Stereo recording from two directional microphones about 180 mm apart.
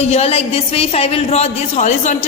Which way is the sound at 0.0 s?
35° left (ahead or behind).